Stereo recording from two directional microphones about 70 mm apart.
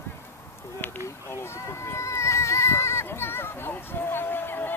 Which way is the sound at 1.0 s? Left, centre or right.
Left.